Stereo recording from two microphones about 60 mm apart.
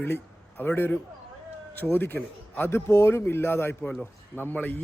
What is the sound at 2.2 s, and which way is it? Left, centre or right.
Speech, left.